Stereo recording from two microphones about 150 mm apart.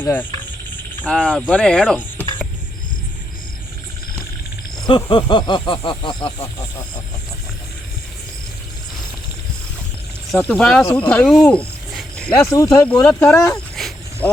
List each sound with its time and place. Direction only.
0.0 s speech: 10° left (ahead or behind)
4.8 s speech: 30° left (ahead or behind)
10.3 s speech: 5° left (ahead or behind)
12.5 s speech: 20° left (ahead or behind)
13.7 s a sound: centre (ahead or behind)